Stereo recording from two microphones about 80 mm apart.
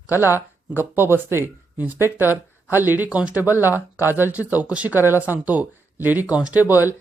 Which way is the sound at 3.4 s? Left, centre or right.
Right.